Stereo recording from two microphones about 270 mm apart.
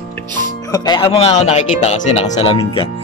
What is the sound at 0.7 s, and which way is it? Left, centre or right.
Speech, centre.